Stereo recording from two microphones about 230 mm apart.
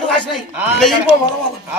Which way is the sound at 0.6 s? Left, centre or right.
Centre.